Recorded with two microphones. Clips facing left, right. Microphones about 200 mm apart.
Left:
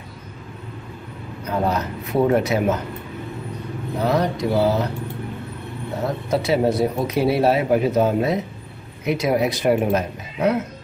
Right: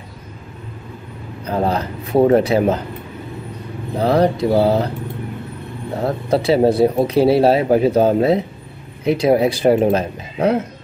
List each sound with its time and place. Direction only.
1.4 s speech: 30° right (ahead or behind)
4.0 s speech: 30° right (ahead or behind)
6.0 s speech: 30° right (ahead or behind)